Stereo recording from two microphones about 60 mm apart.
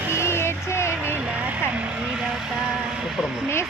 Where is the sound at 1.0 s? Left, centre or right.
Right; by 3.4 s centre.